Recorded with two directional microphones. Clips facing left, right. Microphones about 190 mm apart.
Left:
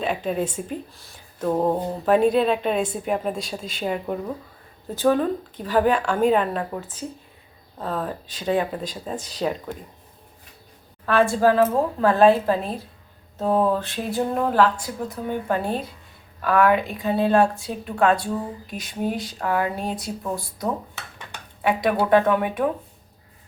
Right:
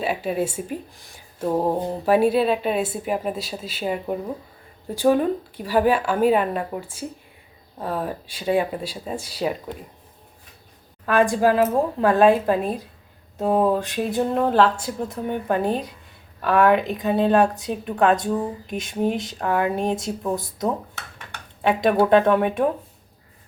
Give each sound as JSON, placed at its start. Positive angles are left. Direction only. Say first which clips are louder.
{"t": 0.0, "sound": "speech", "louder": "right 1 dB", "side_deg": -10}
{"t": 11.0, "sound": "speech", "louder": "even", "side_deg": -15}
{"t": 14.5, "sound": "speech", "louder": "right 1 dB", "side_deg": -25}
{"t": 21.8, "sound": "speech", "louder": "right 2 dB", "side_deg": -25}